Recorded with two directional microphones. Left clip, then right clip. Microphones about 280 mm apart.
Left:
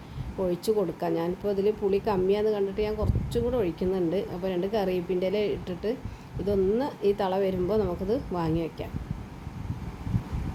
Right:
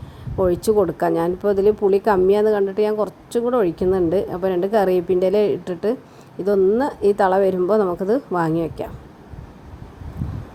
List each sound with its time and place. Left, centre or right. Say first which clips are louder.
0.3 s speech: right 9 dB; right